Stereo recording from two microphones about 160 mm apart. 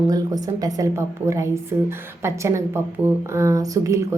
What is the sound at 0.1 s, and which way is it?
A woman's voice, 25° right (ahead or behind).